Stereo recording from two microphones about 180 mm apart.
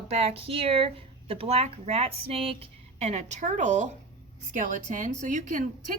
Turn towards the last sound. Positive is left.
turn(degrees=-45)  # may be behind; listen again after turning